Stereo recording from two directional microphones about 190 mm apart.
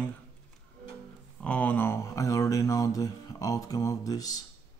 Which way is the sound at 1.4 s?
5° left (ahead or behind).